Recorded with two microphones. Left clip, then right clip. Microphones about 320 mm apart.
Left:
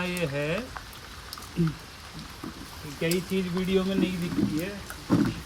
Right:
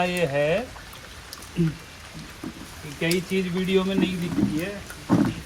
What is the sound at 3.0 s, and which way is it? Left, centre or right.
Speech, right.